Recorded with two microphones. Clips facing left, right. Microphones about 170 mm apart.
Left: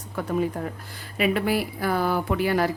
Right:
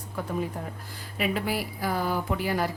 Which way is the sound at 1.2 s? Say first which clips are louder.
Left 5 dB; 70° left (ahead or behind).